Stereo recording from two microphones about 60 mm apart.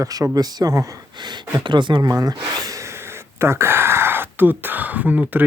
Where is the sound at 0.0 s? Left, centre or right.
Right.